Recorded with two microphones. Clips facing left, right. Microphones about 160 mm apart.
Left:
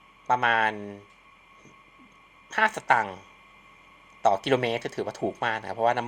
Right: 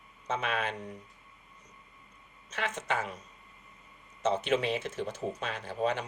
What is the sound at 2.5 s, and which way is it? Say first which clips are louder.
Speech: left 8 dB; 70° left (ahead or behind).